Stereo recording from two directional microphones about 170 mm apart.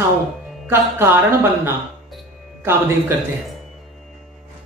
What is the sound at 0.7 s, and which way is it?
Speech, 15° right (ahead or behind).